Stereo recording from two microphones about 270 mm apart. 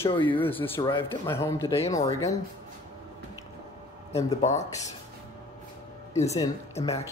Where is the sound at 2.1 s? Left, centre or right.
Centre.